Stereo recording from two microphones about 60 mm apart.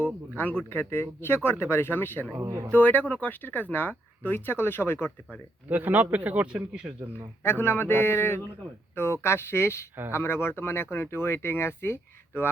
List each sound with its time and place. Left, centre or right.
0.3 s speech: left
2.4 s speech: right
2.7 s speech: left
5.6 s a man's voice: right
7.4 s speech: left